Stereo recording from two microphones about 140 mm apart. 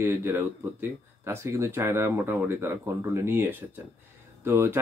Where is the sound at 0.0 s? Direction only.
15° right (ahead or behind).